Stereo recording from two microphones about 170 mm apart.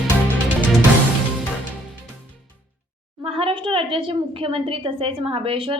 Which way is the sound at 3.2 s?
35° right (ahead or behind).